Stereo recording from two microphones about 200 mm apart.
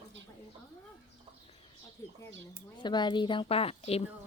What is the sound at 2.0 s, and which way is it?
A woman's voice, 15° left (ahead or behind).